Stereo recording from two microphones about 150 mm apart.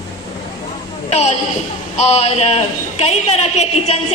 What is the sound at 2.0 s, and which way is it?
A woman's voice, 45° left (ahead or behind).